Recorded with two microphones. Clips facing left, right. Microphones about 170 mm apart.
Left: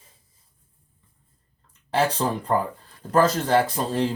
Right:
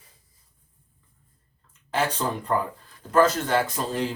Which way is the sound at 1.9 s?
35° left (ahead or behind).